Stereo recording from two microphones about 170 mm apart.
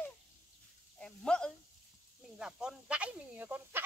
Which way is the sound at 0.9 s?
5° left (ahead or behind).